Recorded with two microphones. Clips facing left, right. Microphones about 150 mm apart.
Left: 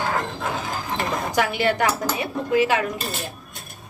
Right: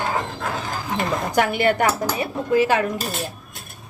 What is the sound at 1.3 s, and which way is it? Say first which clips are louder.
A woman's voice: right 3 dB; 50° right (ahead or behind).